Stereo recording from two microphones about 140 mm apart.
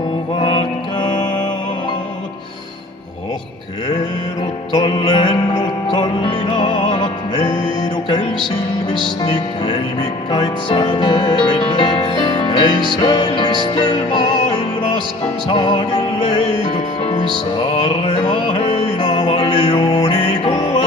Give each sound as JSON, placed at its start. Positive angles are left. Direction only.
{"t": 0.3, "sound": "music", "side_deg": 35}
{"t": 4.7, "sound": "music", "side_deg": 35}
{"t": 9.2, "sound": "music", "side_deg": 35}
{"t": 15.4, "sound": "music", "side_deg": 35}
{"t": 18.0, "sound": "music", "side_deg": 40}